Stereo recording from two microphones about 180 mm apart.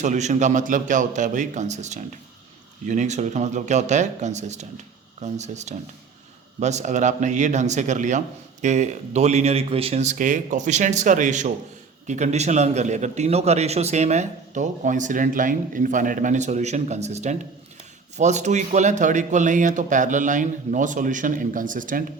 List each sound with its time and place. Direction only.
0.0 s a man's voice: 40° right (ahead or behind)